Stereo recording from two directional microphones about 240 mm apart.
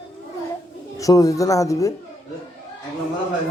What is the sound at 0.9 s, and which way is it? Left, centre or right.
Speech, centre.